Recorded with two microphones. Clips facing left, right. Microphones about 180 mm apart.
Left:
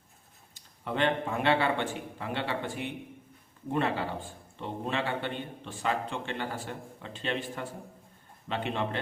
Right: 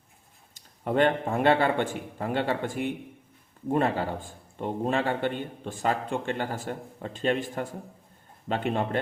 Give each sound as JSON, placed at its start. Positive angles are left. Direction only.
{"t": 0.5, "sound": "a man's voice", "side_deg": -45}